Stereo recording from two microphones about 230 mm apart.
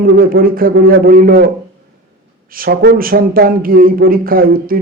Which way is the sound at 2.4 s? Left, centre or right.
Right.